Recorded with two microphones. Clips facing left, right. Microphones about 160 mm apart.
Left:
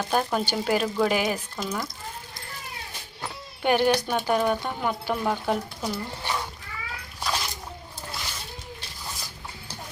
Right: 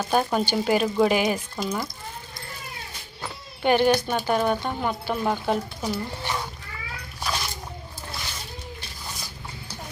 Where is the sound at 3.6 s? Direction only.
Centre (ahead or behind).